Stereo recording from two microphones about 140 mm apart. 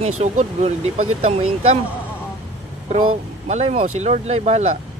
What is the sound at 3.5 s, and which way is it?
Speech, 50° right (ahead or behind).